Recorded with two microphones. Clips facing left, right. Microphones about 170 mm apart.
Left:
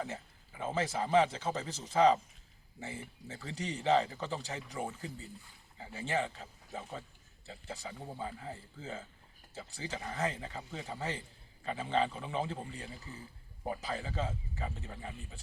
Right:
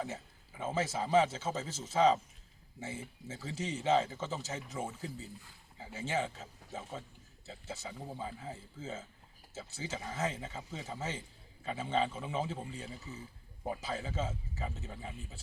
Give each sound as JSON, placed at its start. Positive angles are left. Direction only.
{"t": 0.6, "sound": "speech", "side_deg": -5}